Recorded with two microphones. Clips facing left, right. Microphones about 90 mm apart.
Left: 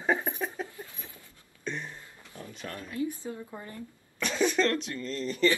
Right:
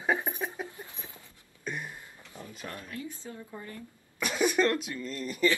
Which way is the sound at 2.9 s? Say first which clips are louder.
Left 7 dB; 20° left (ahead or behind).